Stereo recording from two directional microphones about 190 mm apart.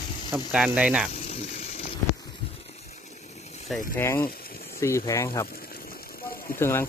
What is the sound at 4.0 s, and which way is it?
Speech, 15° left (ahead or behind).